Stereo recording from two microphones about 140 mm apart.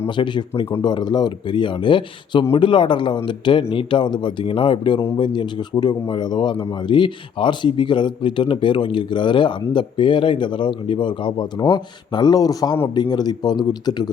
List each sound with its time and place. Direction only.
0.1 s speech: 35° left (ahead or behind)